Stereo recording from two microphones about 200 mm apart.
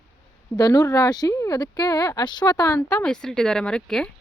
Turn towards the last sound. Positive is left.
turn(degrees=5)  # may be behind; listen again after turning